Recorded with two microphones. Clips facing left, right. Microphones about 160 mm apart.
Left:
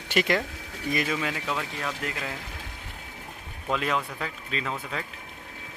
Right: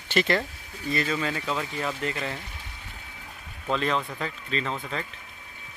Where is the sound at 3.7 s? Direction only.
10° left (ahead or behind).